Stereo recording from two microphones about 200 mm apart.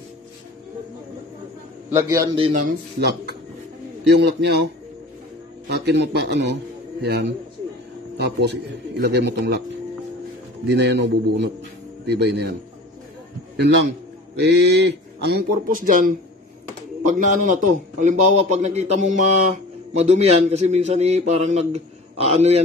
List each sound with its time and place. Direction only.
1.9 s a man's voice: 15° right (ahead or behind)
4.1 s speech: 55° right (ahead or behind)
5.7 s a man's voice: 55° right (ahead or behind)
10.7 s speech: 60° right (ahead or behind)
13.6 s speech: 60° right (ahead or behind)
17.0 s a man's voice: 40° right (ahead or behind)